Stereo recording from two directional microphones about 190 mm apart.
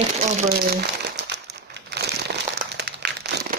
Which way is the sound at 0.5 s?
55° right (ahead or behind).